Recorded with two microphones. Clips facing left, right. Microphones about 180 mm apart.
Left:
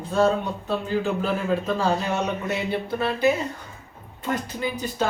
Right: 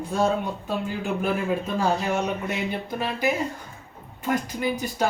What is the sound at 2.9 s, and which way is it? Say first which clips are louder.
Speech: left 5 dB; 15° right (ahead or behind).